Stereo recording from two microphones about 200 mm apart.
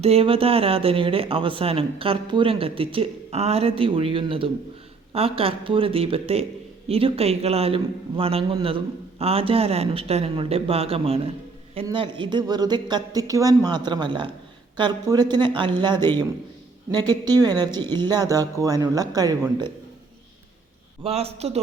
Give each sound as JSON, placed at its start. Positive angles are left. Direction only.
{"t": 0.0, "sound": "speech", "side_deg": -30}
{"t": 21.0, "sound": "a man's voice", "side_deg": -30}